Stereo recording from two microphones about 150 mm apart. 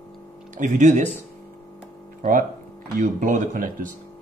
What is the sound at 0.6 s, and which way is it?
Speech, 55° right (ahead or behind).